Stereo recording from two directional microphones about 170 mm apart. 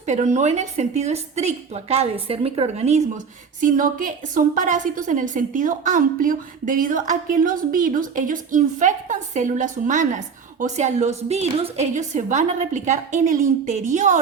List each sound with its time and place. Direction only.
0.0 s a woman's voice: 45° right (ahead or behind)
3.6 s a woman's voice: 50° right (ahead or behind)